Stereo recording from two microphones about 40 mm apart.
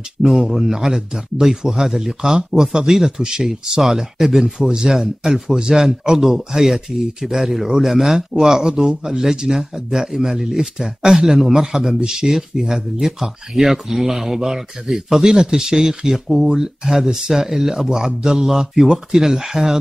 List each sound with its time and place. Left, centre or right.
0.2 s speech: centre